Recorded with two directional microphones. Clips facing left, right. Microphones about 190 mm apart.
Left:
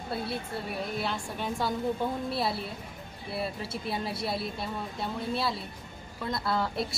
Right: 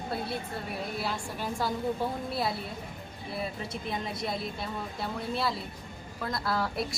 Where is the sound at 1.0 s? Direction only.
Centre (ahead or behind).